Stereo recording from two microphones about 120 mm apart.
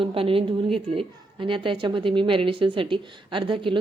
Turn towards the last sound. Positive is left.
turn(degrees=-45)  # may be behind; listen again after turning